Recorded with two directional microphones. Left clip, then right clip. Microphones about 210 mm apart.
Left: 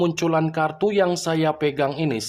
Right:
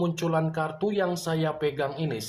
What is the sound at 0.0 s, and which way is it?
Speech, 40° left (ahead or behind).